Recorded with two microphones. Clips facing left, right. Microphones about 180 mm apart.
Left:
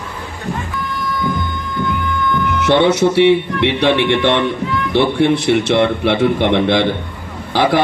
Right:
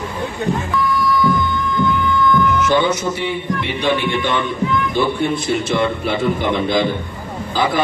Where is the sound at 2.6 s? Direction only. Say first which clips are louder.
Left 4 dB; 70° left (ahead or behind).